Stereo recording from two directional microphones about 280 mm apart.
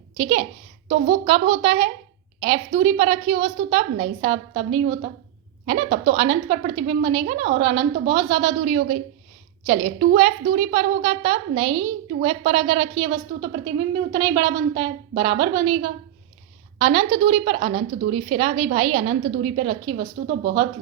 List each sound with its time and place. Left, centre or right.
0.2 s a woman's voice: centre
20.2 s speech: right